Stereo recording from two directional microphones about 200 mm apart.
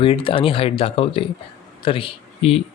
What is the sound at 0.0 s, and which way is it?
A man's voice, 25° left (ahead or behind).